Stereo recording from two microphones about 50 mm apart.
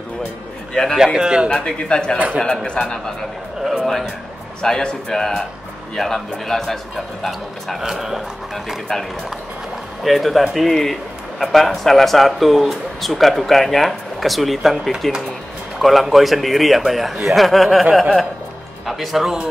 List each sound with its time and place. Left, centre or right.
0.9 s a man's voice: centre
1.5 s a man's voice: centre
2.1 s a man's voice: right
2.4 s a man's voice: centre
3.7 s a man's voice: centre
10.0 s speech: centre
18.9 s speech: centre